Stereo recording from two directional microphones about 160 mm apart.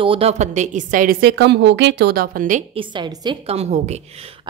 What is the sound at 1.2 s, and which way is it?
A woman's voice, 90° right.